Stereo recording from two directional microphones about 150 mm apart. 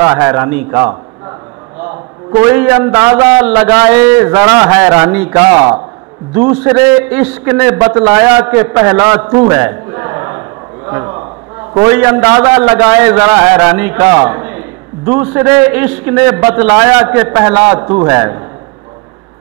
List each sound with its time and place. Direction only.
0.0 s a man's voice: 10° right (ahead or behind)
10.9 s a sound: 15° right (ahead or behind)
11.7 s a man's voice: 10° right (ahead or behind)